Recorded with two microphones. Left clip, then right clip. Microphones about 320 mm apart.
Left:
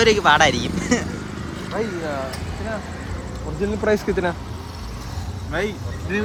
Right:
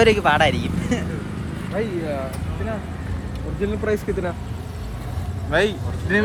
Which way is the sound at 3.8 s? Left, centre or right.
Left.